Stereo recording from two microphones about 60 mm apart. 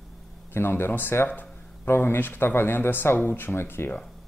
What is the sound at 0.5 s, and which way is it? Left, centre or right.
Speech, left.